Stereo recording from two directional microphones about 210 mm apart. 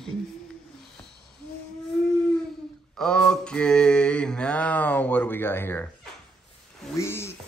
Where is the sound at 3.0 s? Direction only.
5° left (ahead or behind).